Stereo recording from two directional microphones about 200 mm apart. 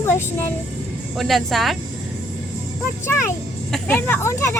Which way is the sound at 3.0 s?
10° left (ahead or behind).